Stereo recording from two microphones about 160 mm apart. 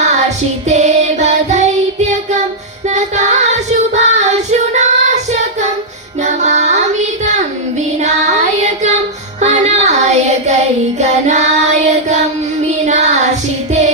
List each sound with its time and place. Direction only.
0.7 s music: 45° right (ahead or behind)
2.9 s child singing: 45° right (ahead or behind)
6.2 s music: 45° right (ahead or behind)
8.6 s child singing: 45° right (ahead or behind)
9.4 s music: 45° right (ahead or behind)
11.0 s child singing: 45° right (ahead or behind)